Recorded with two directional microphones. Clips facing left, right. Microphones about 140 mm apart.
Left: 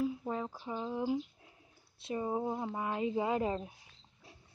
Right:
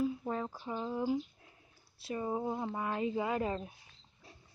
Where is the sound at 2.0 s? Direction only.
20° left (ahead or behind).